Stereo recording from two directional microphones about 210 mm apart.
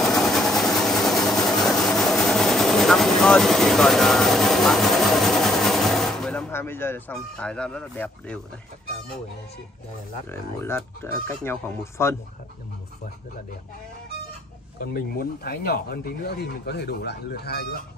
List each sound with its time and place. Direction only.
0.0 s vehicle: centre (ahead or behind)
10.6 s speech: 10° left (ahead or behind)
14.8 s speech: 45° left (ahead or behind)